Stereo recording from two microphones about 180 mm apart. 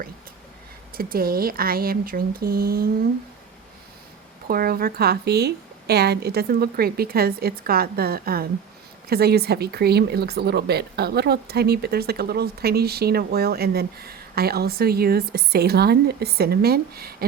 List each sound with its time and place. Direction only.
0.9 s speech: 55° right (ahead or behind)
4.4 s speech: 55° right (ahead or behind)